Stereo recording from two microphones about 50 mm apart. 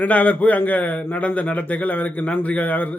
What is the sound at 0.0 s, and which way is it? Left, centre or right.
A man's voice, left.